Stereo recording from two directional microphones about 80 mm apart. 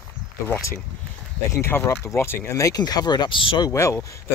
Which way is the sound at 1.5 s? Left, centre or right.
Left.